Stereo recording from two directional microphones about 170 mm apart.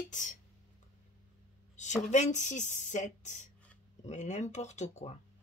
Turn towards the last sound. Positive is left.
turn(degrees=40)  # may be behind; listen again after turning